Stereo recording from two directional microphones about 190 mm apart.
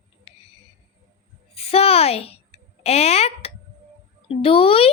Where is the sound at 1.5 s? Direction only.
30° left (ahead or behind).